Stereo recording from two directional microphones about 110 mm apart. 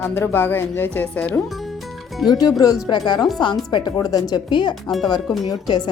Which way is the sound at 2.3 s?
35° left (ahead or behind).